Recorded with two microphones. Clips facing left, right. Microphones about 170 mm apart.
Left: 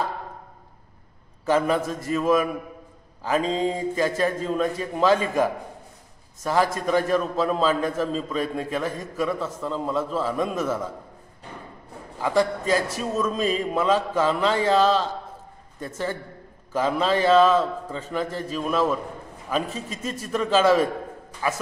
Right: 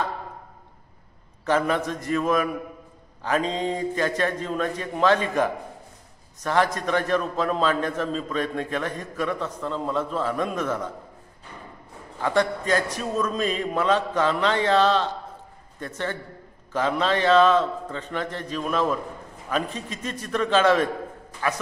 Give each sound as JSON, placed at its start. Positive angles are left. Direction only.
{"t": 1.4, "sound": "a man's voice", "side_deg": 5}
{"t": 12.2, "sound": "a man's voice", "side_deg": 5}